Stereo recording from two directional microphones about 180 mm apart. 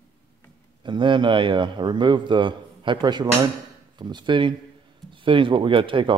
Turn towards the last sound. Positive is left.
turn(degrees=-30)  # may be behind; listen again after turning